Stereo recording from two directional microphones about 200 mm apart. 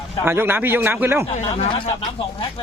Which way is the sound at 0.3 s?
10° right (ahead or behind).